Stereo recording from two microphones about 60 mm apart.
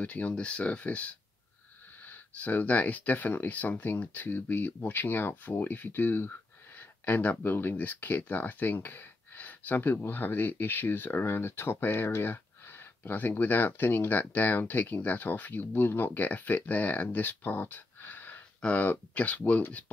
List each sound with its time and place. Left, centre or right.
0.0 s speech: left